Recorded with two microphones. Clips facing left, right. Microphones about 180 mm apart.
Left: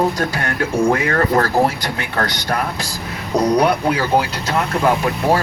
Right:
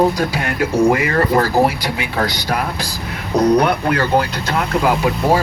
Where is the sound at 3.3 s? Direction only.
10° left (ahead or behind).